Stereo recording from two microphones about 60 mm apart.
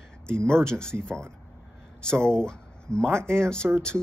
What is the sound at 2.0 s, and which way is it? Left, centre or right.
Speech, centre.